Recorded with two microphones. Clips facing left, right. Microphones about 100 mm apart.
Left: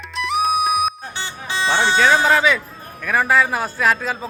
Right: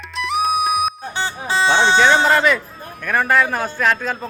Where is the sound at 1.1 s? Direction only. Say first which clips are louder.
Right 6 dB; 35° right (ahead or behind).